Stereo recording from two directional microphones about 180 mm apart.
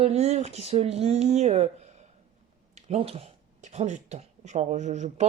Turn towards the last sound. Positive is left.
turn(degrees=-40)  # may be behind; listen again after turning